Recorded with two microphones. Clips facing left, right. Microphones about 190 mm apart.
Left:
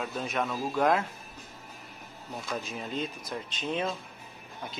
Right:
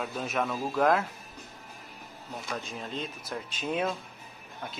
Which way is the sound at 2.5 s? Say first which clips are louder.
Left 3 dB; 5° left (ahead or behind).